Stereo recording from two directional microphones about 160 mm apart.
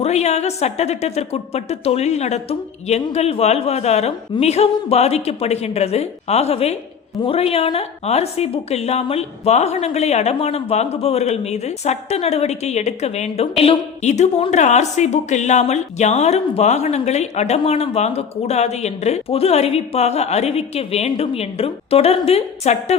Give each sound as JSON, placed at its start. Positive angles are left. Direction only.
{"t": 0.0, "sound": "a woman's voice", "side_deg": 45}